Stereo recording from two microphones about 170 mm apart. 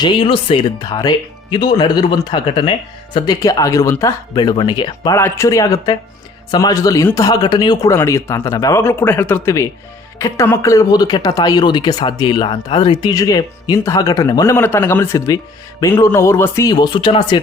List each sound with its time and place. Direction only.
0.0 s speech: 30° left (ahead or behind)